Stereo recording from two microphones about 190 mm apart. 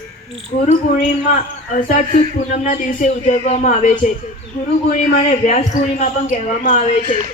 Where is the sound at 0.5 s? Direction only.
50° left (ahead or behind).